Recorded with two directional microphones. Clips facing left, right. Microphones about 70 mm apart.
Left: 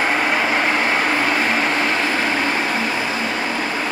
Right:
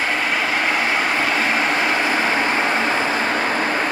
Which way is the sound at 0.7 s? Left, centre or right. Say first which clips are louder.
Left 1 dB; centre.